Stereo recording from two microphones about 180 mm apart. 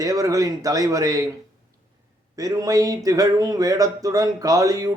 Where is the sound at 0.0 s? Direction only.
20° right (ahead or behind).